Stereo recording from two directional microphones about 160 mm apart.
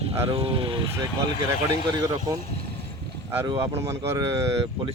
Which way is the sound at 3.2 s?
20° right (ahead or behind).